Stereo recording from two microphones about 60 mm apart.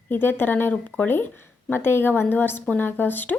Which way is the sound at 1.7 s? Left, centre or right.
Left.